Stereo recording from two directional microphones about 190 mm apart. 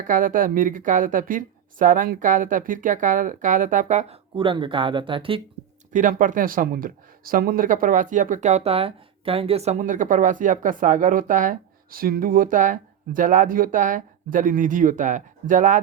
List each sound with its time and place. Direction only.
0.0 s speech: 45° right (ahead or behind)
4.4 s speech: 25° right (ahead or behind)
5.9 s speech: 45° right (ahead or behind)